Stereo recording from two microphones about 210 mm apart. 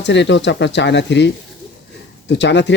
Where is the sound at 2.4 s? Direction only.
55° left (ahead or behind).